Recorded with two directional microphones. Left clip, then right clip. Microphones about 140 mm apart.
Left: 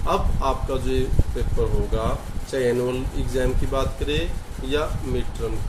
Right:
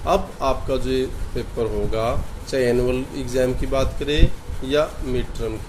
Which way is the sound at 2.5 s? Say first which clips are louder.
Right 3 dB; 50° right (ahead or behind).